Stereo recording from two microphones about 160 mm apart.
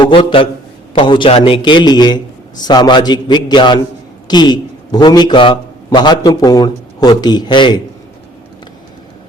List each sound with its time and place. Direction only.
0.0 s a man's voice: 35° left (ahead or behind)